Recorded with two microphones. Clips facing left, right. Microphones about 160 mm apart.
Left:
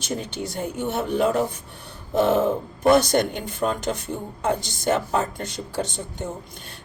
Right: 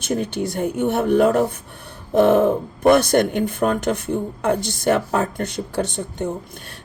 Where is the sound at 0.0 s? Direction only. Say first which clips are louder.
Right 6 dB; 55° right (ahead or behind).